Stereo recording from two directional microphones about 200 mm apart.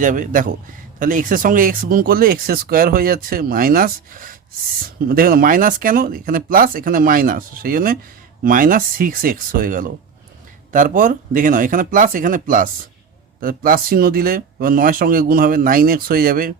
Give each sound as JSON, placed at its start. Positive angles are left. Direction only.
{"t": 0.0, "sound": "speech", "side_deg": -40}